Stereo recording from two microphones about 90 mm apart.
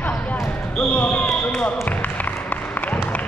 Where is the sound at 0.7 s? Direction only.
10° left (ahead or behind).